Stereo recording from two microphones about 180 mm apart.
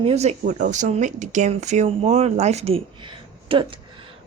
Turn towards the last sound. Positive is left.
turn(degrees=-25)  # may be behind; listen again after turning